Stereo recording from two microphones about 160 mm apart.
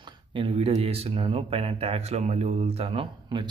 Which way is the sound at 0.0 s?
30° right (ahead or behind).